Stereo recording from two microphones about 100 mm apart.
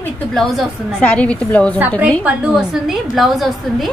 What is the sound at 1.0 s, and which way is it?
Speech, 15° left (ahead or behind).